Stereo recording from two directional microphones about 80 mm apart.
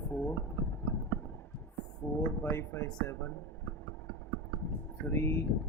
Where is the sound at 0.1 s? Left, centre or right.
Left.